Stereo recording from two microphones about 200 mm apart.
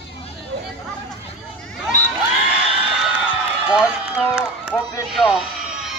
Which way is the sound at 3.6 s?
5° right (ahead or behind).